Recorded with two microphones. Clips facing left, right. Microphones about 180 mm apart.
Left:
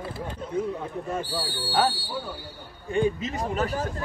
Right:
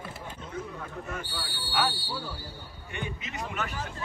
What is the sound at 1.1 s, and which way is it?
Speech, 35° left (ahead or behind).